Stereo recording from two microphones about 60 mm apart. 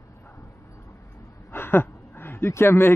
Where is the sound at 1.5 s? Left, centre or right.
Left.